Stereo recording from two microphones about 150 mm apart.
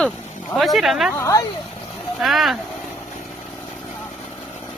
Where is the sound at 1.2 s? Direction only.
20° left (ahead or behind).